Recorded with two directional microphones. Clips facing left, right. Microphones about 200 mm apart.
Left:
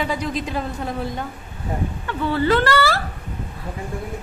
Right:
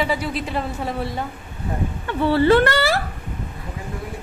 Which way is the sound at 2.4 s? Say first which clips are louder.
Right 2 dB; 25° right (ahead or behind).